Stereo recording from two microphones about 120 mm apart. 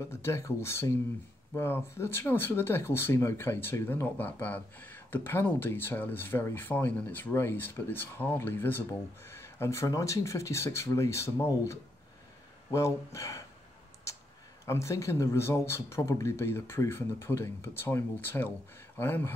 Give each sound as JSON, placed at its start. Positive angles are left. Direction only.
{"t": 0.1, "sound": "speech", "side_deg": 25}
{"t": 14.1, "sound": "a sound", "side_deg": 25}
{"t": 14.7, "sound": "speech", "side_deg": 25}